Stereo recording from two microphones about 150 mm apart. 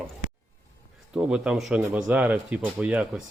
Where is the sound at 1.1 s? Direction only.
5° right (ahead or behind).